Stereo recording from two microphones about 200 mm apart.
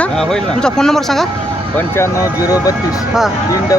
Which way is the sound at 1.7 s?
15° left (ahead or behind).